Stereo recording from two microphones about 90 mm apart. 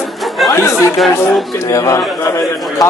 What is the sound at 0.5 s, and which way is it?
Speech, 35° left (ahead or behind).